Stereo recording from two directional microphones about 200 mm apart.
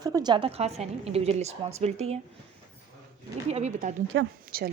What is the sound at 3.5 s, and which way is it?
Speech, 35° right (ahead or behind).